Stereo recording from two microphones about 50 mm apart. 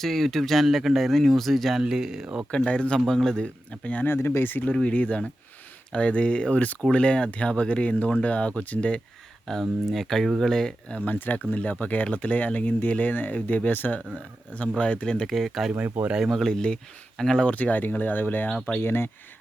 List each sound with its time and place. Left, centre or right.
0.0 s speech: centre
1.8 s speech: centre
2.5 s speech: left
3.1 s speech: centre
3.4 s speech: left
4.0 s speech: left
4.7 s speech: left
9.5 s speech: centre
10.9 s speech: left; by 15.3 s centre
15.3 s speech: centre
17.4 s speech: left